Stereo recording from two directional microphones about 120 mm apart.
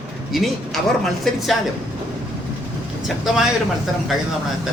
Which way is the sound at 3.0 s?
5° right (ahead or behind).